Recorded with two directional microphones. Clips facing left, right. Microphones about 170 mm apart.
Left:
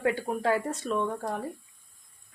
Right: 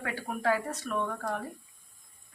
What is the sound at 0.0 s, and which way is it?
Speech, 30° left (ahead or behind).